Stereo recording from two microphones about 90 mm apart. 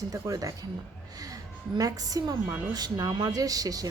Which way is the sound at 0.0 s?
40° right (ahead or behind).